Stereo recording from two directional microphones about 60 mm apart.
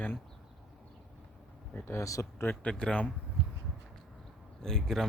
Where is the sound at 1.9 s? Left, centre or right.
Left.